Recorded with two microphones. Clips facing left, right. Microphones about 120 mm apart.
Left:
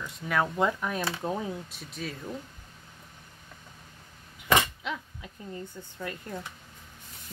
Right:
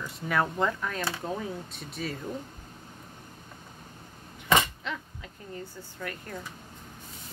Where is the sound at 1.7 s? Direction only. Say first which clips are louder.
Right 2 dB; centre (ahead or behind).